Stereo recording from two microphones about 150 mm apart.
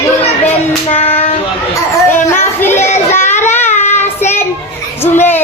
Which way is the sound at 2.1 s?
15° left (ahead or behind).